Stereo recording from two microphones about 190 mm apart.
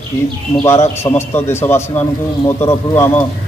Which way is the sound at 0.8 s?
15° left (ahead or behind).